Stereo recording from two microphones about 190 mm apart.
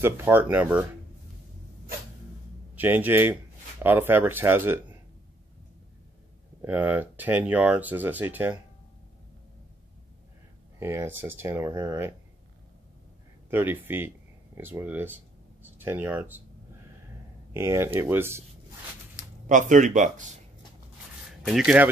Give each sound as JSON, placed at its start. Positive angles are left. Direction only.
{"t": 0.0, "sound": "speech", "side_deg": -10}
{"t": 2.7, "sound": "speech", "side_deg": -10}
{"t": 6.6, "sound": "speech", "side_deg": -10}
{"t": 10.8, "sound": "speech", "side_deg": -15}
{"t": 13.5, "sound": "speech", "side_deg": -10}
{"t": 17.6, "sound": "speech", "side_deg": -15}
{"t": 19.4, "sound": "speech", "side_deg": -40}
{"t": 21.5, "sound": "speech", "side_deg": 0}